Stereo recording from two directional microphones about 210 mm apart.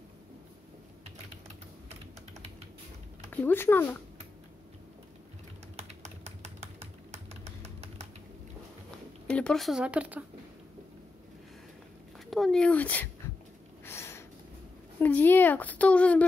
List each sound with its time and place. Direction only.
3.3 s a woman's voice: 10° left (ahead or behind)
5.8 s typing: 30° right (ahead or behind)
9.3 s speech: 5° left (ahead or behind)
12.3 s speech: centre (ahead or behind)
13.8 s a sound: 10° left (ahead or behind)
15.0 s a woman's voice: 10° left (ahead or behind)